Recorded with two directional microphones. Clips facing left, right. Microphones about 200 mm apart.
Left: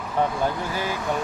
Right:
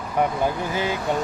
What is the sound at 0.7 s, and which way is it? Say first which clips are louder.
Speech: right 3 dB; 20° right (ahead or behind).